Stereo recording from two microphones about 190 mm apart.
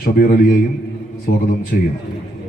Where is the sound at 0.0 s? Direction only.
50° left (ahead or behind).